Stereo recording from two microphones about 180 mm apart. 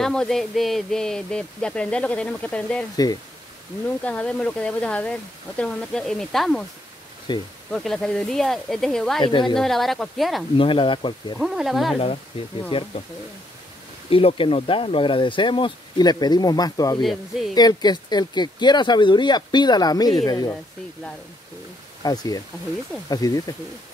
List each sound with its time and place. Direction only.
0.0 s speech: 5° left (ahead or behind)
4.0 s speech: 5° left (ahead or behind)
7.3 s speech: 25° left (ahead or behind)
7.7 s speech: 5° left (ahead or behind)
9.2 s speech: 25° left (ahead or behind)
9.6 s speech: centre (ahead or behind)
10.6 s speech: 30° left (ahead or behind)
11.3 s speech: centre (ahead or behind)
12.6 s speech: 30° left (ahead or behind)
14.1 s speech: 30° left (ahead or behind)
17.0 s speech: centre (ahead or behind)
17.6 s speech: 20° left (ahead or behind)
22.0 s speech: 20° left (ahead or behind)